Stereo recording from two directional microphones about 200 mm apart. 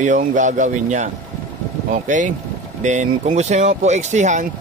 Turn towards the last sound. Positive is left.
turn(degrees=-35)  # may be behind; listen again after turning